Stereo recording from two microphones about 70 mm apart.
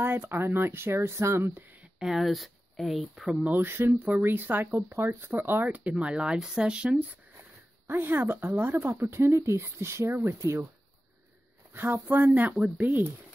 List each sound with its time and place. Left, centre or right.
0.0 s speech: right
2.0 s speech: centre
3.4 s speech: right; by 7.1 s centre
7.3 s speech: right
11.7 s speech: right
12.3 s speech: centre